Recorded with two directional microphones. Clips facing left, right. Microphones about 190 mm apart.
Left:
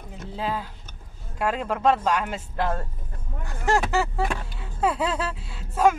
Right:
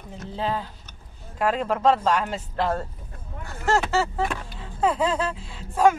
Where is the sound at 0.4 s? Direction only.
5° left (ahead or behind).